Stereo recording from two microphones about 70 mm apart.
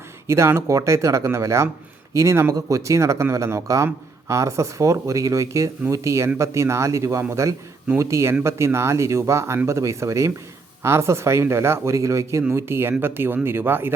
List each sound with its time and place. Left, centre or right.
0.3 s speech: right
12.5 s speech: right